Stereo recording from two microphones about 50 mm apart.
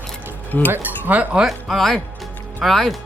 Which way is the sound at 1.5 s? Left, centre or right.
Centre.